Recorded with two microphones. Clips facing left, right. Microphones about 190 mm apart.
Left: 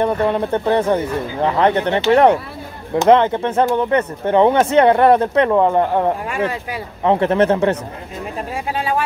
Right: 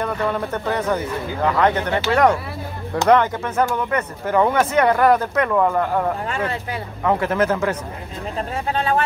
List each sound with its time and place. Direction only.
0.0 s speech: 25° left (ahead or behind)
8.7 s speech: 10° left (ahead or behind)